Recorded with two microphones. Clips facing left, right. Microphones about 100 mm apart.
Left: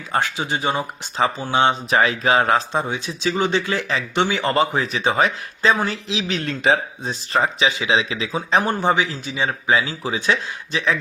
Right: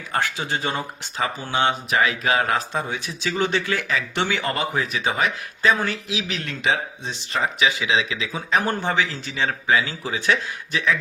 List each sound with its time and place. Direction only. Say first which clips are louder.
0.1 s speech: left 2 dB; 20° left (ahead or behind)
8.8 s speech: left 4 dB; 20° left (ahead or behind)